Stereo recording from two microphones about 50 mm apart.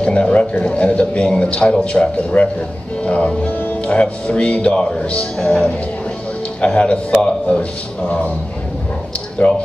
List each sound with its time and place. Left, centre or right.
0.0 s a man's voice: left
9.4 s speech: left